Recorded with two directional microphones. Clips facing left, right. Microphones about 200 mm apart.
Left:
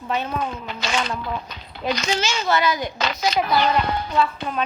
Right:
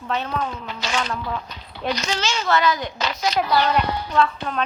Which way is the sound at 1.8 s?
10° left (ahead or behind).